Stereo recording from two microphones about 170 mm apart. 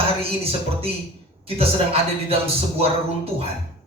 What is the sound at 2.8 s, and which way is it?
Speech, 35° right (ahead or behind).